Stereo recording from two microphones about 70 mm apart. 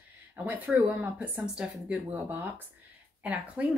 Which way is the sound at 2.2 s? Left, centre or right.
Right.